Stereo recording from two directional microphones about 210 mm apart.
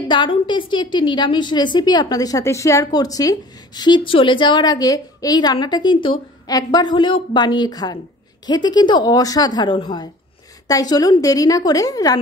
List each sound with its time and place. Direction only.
0.1 s a woman's voice: 20° left (ahead or behind)